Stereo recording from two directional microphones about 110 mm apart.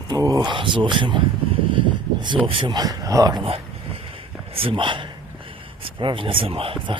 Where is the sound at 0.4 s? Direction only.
50° right (ahead or behind).